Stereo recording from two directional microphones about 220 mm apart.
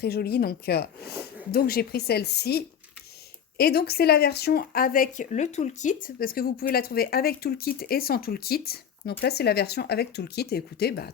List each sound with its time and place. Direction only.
0.0 s speech: 45° left (ahead or behind)